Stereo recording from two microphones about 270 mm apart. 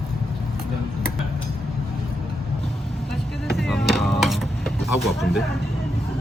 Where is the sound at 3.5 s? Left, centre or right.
Centre.